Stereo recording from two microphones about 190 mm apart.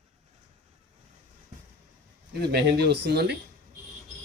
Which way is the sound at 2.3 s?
60° right (ahead or behind).